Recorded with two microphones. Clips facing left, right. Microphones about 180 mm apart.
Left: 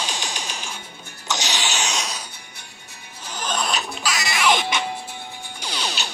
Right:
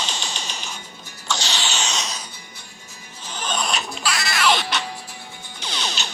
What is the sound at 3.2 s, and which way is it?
Music, 10° left (ahead or behind).